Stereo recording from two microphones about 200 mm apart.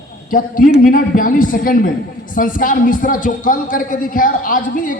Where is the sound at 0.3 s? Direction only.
45° left (ahead or behind).